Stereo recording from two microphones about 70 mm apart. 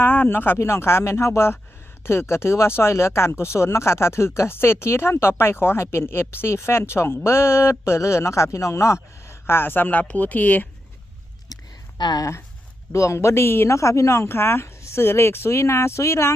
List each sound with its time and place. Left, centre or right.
0.0 s speech: left
11.5 s a sound: left
11.9 s speech: left
12.9 s speech: left